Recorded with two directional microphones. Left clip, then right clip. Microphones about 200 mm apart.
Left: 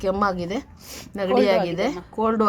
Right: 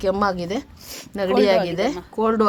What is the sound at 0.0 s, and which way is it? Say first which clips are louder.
A woman's voice: right 2 dB; 5° right (ahead or behind).